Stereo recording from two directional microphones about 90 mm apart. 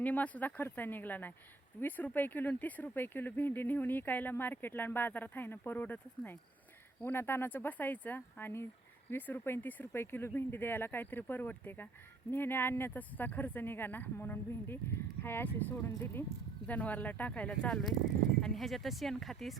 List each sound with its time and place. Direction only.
0.0 s speech: 15° left (ahead or behind); by 19.5 s centre (ahead or behind)